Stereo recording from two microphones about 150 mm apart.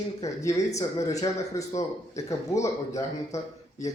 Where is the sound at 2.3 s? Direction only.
20° left (ahead or behind).